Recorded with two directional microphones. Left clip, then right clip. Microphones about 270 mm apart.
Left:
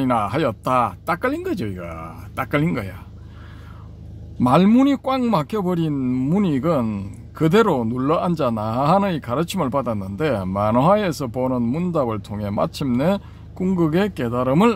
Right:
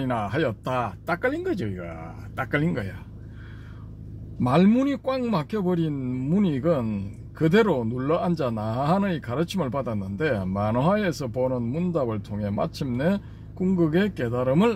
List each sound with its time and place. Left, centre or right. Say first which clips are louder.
0.0 s speech: left 6 dB; left
4.4 s speech: left 6 dB; left